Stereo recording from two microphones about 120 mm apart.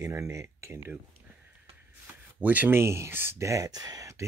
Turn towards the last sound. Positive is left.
turn(degrees=-25)  # may be behind; listen again after turning